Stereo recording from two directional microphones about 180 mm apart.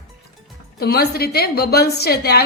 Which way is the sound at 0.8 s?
60° left (ahead or behind).